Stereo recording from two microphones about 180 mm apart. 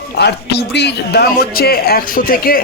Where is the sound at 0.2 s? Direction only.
65° left (ahead or behind).